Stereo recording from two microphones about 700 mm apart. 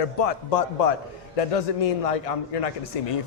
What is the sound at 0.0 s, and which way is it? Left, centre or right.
A man's voice, left.